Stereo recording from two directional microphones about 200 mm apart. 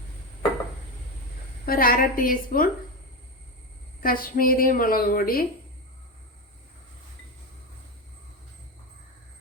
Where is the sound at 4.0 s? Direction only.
45° left (ahead or behind).